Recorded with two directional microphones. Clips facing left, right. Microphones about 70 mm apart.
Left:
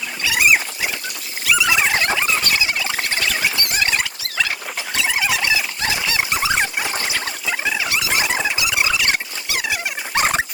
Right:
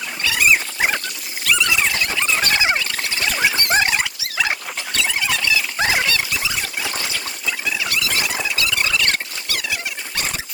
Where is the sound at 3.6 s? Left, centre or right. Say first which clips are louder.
Right 4 dB; right.